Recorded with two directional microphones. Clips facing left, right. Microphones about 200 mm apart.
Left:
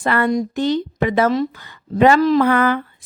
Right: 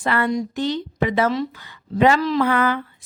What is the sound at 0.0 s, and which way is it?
Speech, 50° left (ahead or behind).